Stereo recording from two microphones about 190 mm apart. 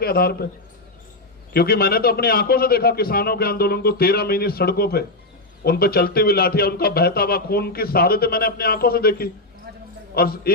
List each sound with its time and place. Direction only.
0.0 s a man's voice: 55° left (ahead or behind)
1.5 s a man's voice: 55° left (ahead or behind)